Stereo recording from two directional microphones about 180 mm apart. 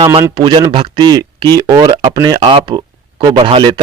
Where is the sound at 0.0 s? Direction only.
30° right (ahead or behind).